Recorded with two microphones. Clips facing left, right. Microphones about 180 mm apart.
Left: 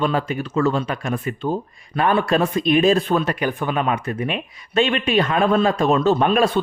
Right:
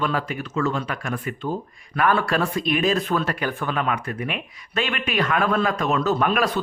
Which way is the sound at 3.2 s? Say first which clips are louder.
Left 3 dB; 20° left (ahead or behind).